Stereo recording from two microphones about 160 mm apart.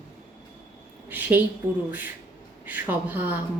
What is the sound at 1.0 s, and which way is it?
Speech, 10° right (ahead or behind).